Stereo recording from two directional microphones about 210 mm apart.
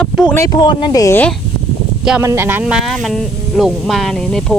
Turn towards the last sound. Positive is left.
turn(degrees=0)  # may be behind; listen again after turning